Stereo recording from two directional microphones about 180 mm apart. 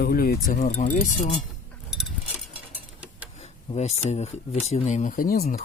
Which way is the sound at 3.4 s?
40° left (ahead or behind).